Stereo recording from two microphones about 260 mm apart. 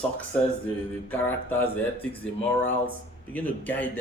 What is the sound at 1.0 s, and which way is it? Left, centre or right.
Speech, centre.